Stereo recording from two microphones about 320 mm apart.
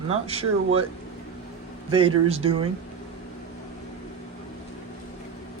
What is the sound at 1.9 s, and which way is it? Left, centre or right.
Speech, centre.